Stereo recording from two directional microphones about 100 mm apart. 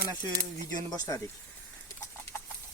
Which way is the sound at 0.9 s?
40° left (ahead or behind).